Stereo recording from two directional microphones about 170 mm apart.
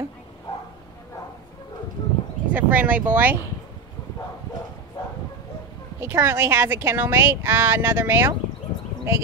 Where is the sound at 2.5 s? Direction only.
10° right (ahead or behind).